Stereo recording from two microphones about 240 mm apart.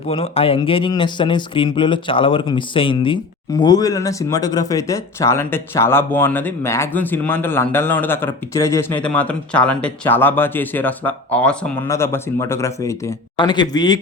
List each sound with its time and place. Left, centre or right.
0.1 s speech: left